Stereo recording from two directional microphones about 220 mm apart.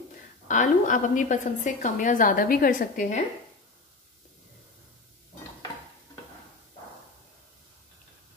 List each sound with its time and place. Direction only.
0.5 s a woman's voice: 35° left (ahead or behind)